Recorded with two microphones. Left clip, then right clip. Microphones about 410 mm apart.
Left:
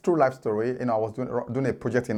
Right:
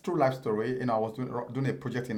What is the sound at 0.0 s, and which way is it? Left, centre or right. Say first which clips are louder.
Speech: left 5 dB; left.